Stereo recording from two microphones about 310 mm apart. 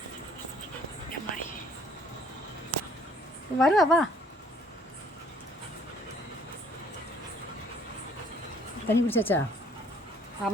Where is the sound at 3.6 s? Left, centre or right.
Centre.